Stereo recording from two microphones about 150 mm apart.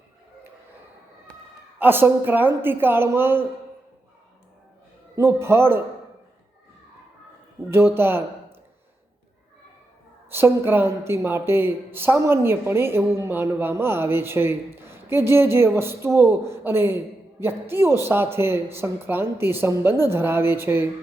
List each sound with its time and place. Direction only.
1.8 s a woman's voice: 15° right (ahead or behind)
5.1 s a woman's voice: 15° right (ahead or behind)
7.7 s speech: 15° right (ahead or behind)
10.2 s a woman's voice: 15° right (ahead or behind)